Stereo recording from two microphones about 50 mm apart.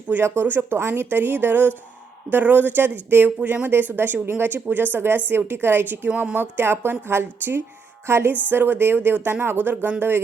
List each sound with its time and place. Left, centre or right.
0.3 s speech: right
8.0 s music: right
8.3 s speech: right